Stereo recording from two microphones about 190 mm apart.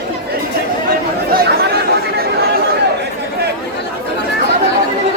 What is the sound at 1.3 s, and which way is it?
Chatter, 60° right (ahead or behind).